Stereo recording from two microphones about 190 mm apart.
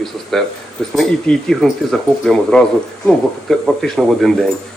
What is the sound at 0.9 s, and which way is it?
Speech, centre (ahead or behind).